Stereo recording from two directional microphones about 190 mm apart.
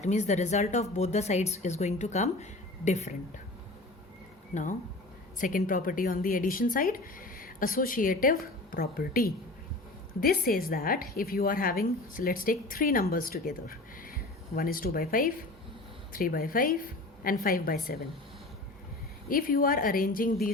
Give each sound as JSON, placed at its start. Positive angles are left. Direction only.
{"t": 0.0, "sound": "speech", "side_deg": 35}
{"t": 4.5, "sound": "a woman's voice", "side_deg": 35}
{"t": 19.3, "sound": "a woman's voice", "side_deg": 50}